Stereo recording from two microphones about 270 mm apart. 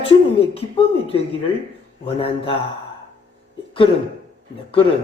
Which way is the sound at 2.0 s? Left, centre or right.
Centre.